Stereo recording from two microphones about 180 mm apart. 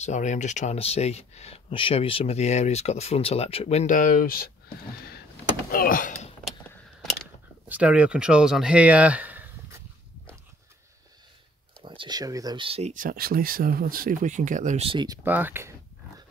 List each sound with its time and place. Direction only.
0.0 s speech: 40° left (ahead or behind)
5.7 s speech: 50° left (ahead or behind)
7.6 s speech: 10° right (ahead or behind)
11.8 s speech: 30° right (ahead or behind)
12.9 s speech: 50° right (ahead or behind)
14.9 s speech: 25° right (ahead or behind)
15.2 s speech: 10° right (ahead or behind)